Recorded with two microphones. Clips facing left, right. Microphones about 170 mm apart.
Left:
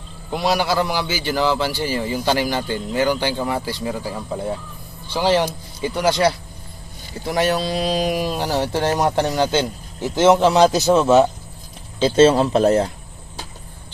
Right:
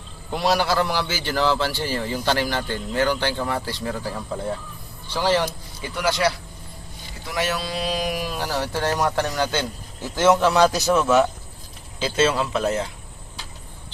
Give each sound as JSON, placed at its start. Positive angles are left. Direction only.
{"t": 0.3, "sound": "a man's voice", "side_deg": 5}
{"t": 5.9, "sound": "speech", "side_deg": 30}